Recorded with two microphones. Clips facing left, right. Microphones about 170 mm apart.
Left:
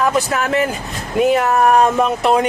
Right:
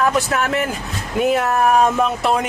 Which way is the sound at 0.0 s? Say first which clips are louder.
Left 1 dB; centre (ahead or behind).